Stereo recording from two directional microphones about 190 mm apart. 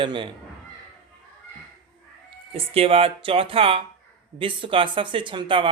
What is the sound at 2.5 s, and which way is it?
Speech, 30° right (ahead or behind).